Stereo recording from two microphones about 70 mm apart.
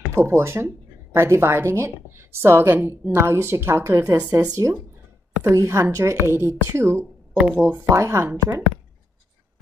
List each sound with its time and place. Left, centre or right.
0.1 s a woman's voice: right
5.5 s a woman's voice: right
7.3 s speech: right
7.9 s speech: right
8.3 s a woman's voice: right